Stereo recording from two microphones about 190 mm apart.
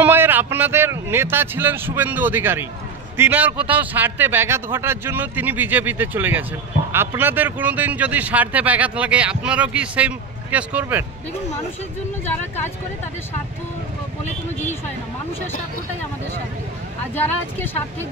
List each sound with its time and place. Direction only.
0.0 s speech: 10° right (ahead or behind)
12.3 s speech: 10° left (ahead or behind)
17.1 s speech: 10° left (ahead or behind)